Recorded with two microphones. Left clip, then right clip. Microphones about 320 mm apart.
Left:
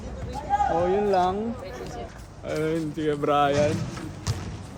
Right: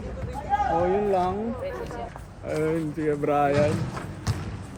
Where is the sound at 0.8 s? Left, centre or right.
Centre.